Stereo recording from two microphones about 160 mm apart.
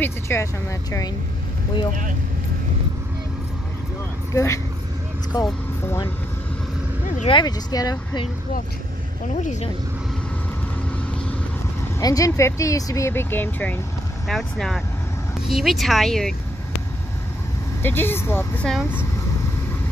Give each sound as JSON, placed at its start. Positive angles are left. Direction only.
{"t": 0.0, "sound": "speech", "side_deg": 15}
{"t": 5.3, "sound": "speech", "side_deg": 25}
{"t": 7.2, "sound": "speech", "side_deg": 25}
{"t": 9.3, "sound": "speech", "side_deg": 50}
{"t": 12.0, "sound": "speech", "side_deg": 20}
{"t": 17.8, "sound": "speech", "side_deg": 15}
{"t": 18.7, "sound": "speech", "side_deg": -5}